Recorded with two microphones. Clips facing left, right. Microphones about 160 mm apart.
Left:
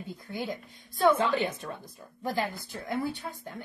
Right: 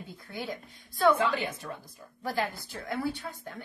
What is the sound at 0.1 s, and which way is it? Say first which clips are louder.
Speech: left 3 dB; 15° left (ahead or behind).